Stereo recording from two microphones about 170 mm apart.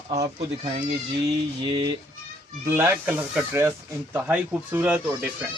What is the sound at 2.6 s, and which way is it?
Speech, 15° right (ahead or behind).